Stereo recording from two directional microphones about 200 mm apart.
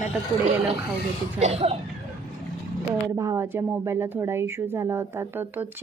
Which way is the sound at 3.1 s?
15° right (ahead or behind).